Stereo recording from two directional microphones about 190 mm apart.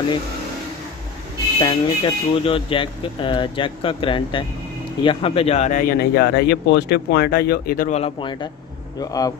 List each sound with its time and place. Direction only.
1.6 s speech: 25° left (ahead or behind); by 7.9 s 50° left (ahead or behind)
7.9 s speech: 30° left (ahead or behind)